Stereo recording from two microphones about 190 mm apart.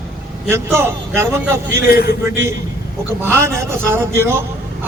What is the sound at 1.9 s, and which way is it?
Speech, 55° left (ahead or behind).